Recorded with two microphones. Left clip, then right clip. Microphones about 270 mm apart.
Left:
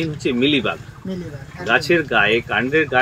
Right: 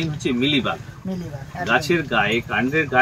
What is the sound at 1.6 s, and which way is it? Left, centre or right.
Speech, centre.